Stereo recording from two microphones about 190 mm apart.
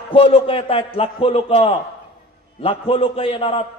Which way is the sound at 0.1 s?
30° left (ahead or behind).